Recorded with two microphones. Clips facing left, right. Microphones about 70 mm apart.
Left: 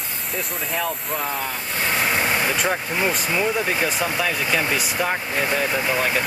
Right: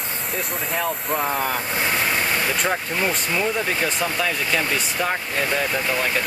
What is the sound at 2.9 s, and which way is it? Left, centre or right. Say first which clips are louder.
Speech: left 1 dB; centre.